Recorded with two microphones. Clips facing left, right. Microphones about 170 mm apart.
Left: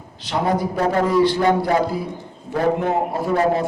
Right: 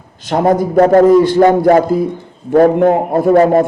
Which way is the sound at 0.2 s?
45° right (ahead or behind).